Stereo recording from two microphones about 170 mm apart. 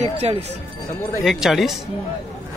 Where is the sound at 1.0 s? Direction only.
15° left (ahead or behind).